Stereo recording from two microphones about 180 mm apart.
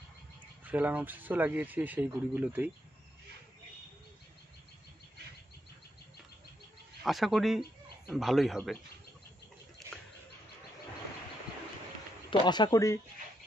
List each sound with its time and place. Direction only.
0.7 s speech: 10° right (ahead or behind)
7.0 s speech: centre (ahead or behind)
12.3 s speech: 25° left (ahead or behind)